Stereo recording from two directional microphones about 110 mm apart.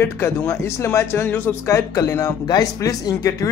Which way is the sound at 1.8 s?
30° left (ahead or behind).